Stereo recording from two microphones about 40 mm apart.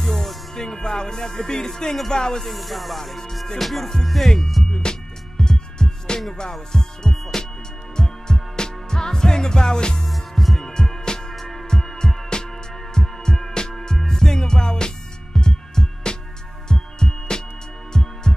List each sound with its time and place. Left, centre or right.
0.0 s music: centre
2.0 s speech: centre
2.4 s music: centre
3.2 s speech: centre
3.5 s music: centre
4.6 s music: centre
7.9 s music: centre
9.9 s music: centre
10.7 s music: centre
16.6 s heart sounds: centre
17.9 s music: centre